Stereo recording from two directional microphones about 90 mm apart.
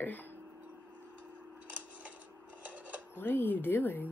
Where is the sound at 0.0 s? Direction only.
20° left (ahead or behind).